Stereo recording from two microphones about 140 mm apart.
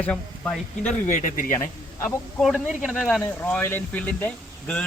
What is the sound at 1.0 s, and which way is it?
Speech, 65° left (ahead or behind).